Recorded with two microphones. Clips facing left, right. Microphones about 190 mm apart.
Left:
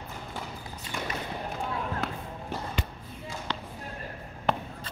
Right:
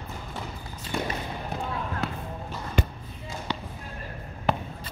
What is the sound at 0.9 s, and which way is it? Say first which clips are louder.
Basketball bounce: right 6 dB; 40° right (ahead or behind).